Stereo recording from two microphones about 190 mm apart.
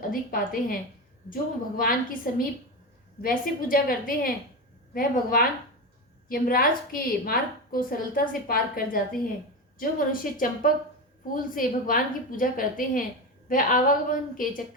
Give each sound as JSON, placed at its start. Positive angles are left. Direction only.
{"t": 0.0, "sound": "a woman's voice", "side_deg": 50}